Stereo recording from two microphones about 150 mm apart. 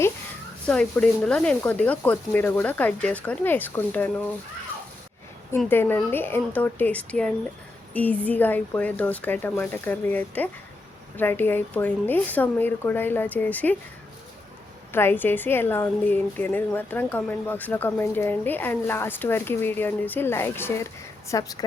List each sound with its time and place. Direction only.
0.6 s a woman's voice: 5° left (ahead or behind)
5.6 s a woman's voice: 15° left (ahead or behind)
14.9 s a woman's voice: 15° left (ahead or behind)